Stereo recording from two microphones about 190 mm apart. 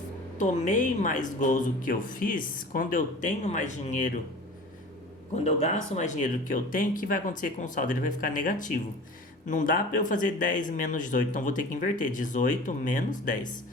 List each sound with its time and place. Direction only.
0.3 s speech: 40° left (ahead or behind)
5.4 s speech: 35° left (ahead or behind)